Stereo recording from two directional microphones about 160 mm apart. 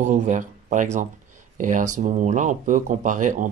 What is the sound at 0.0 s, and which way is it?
Speech, 50° right (ahead or behind).